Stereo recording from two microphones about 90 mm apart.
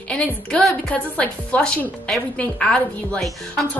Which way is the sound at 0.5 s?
5° left (ahead or behind).